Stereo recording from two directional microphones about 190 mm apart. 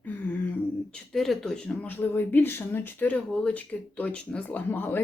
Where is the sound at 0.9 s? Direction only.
Centre (ahead or behind).